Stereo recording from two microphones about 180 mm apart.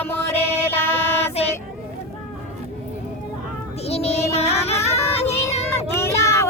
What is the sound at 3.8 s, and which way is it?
Child singing, 35° left (ahead or behind).